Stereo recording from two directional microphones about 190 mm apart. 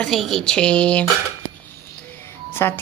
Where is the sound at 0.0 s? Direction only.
Centre (ahead or behind).